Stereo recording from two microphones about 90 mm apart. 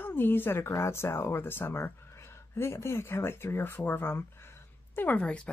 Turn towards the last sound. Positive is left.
turn(degrees=10)  # may be behind; listen again after turning